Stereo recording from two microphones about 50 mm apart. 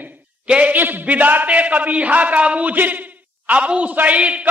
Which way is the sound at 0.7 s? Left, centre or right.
Right.